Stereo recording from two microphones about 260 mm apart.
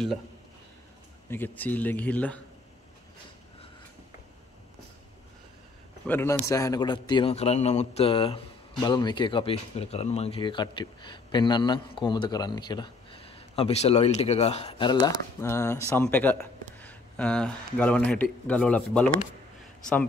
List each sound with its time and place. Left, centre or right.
1.3 s speech: centre
6.0 s a man's voice: centre